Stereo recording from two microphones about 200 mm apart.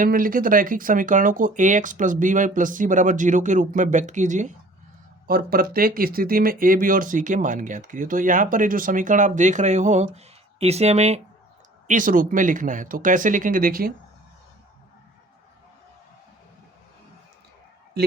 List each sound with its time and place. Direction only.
0.0 s speech: 45° right (ahead or behind)
18.0 s speech: 55° right (ahead or behind)